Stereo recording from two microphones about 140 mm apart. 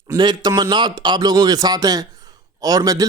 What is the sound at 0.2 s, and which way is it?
A man's voice, 30° right (ahead or behind).